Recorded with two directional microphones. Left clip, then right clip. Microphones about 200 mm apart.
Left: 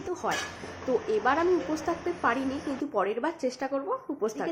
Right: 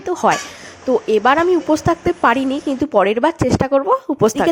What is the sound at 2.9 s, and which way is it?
A woman's voice, 45° right (ahead or behind).